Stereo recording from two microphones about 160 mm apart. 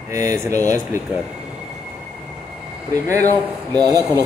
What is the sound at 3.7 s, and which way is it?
Speech, 25° right (ahead or behind).